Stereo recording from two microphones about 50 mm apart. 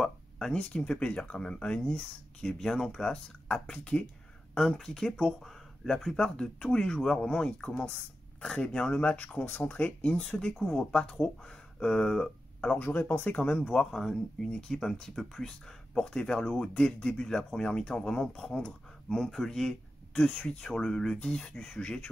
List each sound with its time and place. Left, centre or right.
0.0 s speech: centre
2.4 s speech: centre
6.1 s speech: centre
10.1 s speech: centre
12.7 s speech: left
13.7 s speech: centre